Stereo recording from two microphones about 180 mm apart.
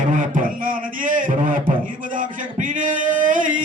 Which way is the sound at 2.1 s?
45° right (ahead or behind).